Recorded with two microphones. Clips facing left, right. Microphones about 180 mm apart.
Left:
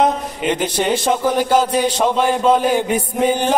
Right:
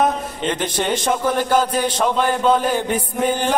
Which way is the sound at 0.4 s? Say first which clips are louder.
Left 4 dB; 10° left (ahead or behind).